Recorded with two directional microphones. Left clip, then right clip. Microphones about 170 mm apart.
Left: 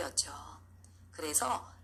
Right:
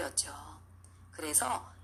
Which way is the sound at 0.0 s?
Centre (ahead or behind).